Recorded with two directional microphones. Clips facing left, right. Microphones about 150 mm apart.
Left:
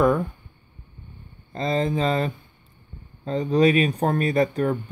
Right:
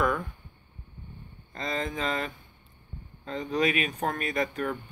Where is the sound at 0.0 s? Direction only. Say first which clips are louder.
Left 8 dB; 35° left (ahead or behind).